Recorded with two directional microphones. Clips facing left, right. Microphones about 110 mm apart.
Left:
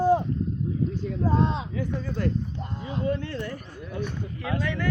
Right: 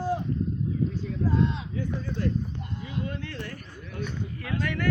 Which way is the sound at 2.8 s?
35° left (ahead or behind).